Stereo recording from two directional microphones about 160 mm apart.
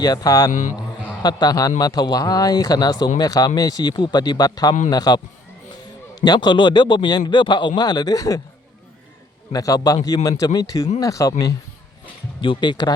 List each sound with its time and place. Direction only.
0.0 s speech: 25° left (ahead or behind)
0.5 s a man's voice: 50° left (ahead or behind)
1.2 s speech: 25° left (ahead or behind)
9.5 s speech: 25° left (ahead or behind)
12.4 s speech: 30° left (ahead or behind)